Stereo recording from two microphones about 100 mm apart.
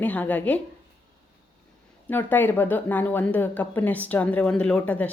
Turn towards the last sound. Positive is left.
turn(degrees=15)  # may be behind; listen again after turning